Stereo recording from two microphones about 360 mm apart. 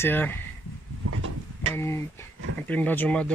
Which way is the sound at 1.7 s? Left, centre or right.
Centre.